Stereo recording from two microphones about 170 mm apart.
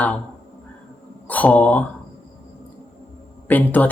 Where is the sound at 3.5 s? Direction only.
10° left (ahead or behind).